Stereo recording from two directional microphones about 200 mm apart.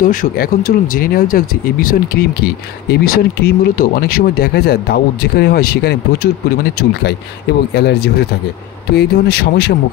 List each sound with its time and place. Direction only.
0.0 s speech: 45° left (ahead or behind)